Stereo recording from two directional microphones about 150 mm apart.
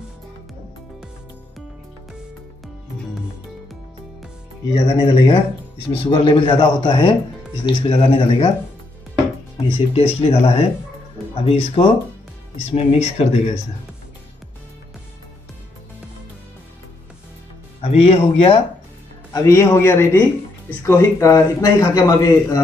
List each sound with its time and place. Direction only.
4.7 s a man's voice: 35° left (ahead or behind)
9.9 s a man's voice: 40° left (ahead or behind)
17.8 s a man's voice: 40° left (ahead or behind)
19.3 s a man's voice: 20° left (ahead or behind)